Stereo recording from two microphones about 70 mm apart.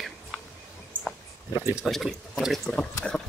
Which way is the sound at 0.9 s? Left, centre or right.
Right.